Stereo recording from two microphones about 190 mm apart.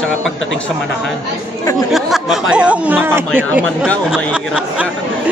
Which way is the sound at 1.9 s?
Centre (ahead or behind).